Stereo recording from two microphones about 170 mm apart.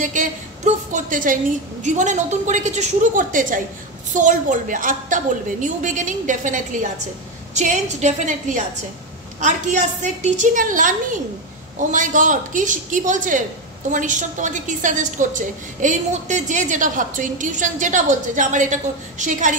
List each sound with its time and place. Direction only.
0.0 s a woman's voice: 50° right (ahead or behind)